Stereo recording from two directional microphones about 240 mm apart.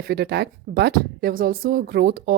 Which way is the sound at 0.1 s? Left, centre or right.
Right.